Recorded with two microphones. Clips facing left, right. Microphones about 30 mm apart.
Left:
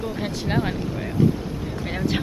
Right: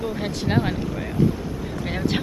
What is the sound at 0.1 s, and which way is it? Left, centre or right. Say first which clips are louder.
Speech: right 3 dB; centre.